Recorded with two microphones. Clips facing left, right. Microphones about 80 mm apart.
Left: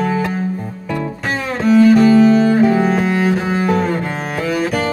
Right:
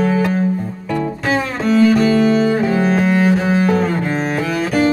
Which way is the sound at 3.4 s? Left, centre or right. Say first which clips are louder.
Right 2 dB; centre.